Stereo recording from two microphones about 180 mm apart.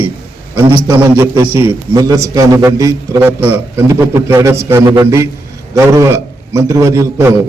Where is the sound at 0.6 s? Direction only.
15° right (ahead or behind).